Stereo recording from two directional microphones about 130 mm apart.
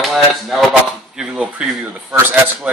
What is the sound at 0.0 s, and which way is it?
Speech, centre (ahead or behind).